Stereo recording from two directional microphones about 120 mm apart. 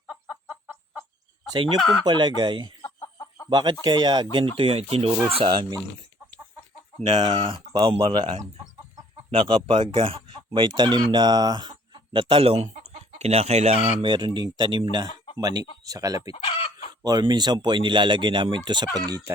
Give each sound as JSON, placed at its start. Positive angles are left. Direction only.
{"t": 0.1, "sound": "chicken", "side_deg": 0}
{"t": 1.8, "sound": "speech", "side_deg": 0}
{"t": 2.0, "sound": "speech", "side_deg": -40}
{"t": 2.8, "sound": "chicken", "side_deg": 25}
{"t": 3.5, "sound": "speech", "side_deg": -40}
{"t": 5.4, "sound": "speech", "side_deg": -40}
{"t": 7.1, "sound": "speech", "side_deg": -40}
{"t": 14.0, "sound": "speech", "side_deg": -40}
{"t": 16.3, "sound": "chicken", "side_deg": 50}
{"t": 17.0, "sound": "speech", "side_deg": -35}